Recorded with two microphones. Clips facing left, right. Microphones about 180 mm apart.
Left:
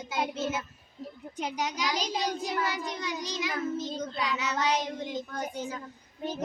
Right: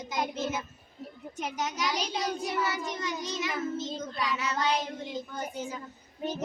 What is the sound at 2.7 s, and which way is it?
Child singing, 15° left (ahead or behind).